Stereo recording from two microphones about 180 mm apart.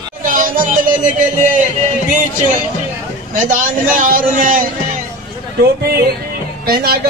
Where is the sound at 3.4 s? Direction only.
45° right (ahead or behind).